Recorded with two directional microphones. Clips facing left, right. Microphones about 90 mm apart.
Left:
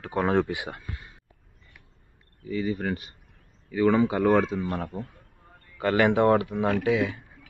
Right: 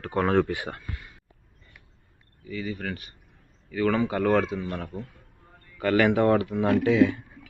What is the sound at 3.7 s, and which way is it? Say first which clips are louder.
Speech: left 3 dB; 15° left (ahead or behind).